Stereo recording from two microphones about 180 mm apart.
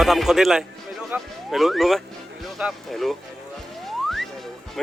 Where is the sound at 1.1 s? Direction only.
Centre (ahead or behind).